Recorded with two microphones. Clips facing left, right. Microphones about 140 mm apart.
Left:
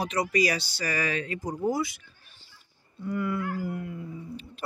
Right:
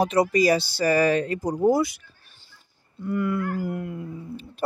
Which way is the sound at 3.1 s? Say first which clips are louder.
Right 4 dB; 50° right (ahead or behind).